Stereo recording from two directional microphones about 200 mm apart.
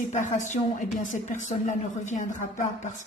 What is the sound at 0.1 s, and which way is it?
A woman's voice, 40° left (ahead or behind).